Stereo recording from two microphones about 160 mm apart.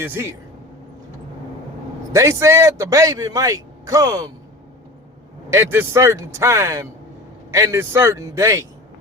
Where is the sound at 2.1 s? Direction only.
20° right (ahead or behind).